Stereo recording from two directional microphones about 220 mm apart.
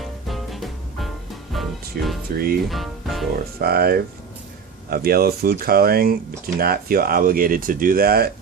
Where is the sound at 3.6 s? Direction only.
45° right (ahead or behind).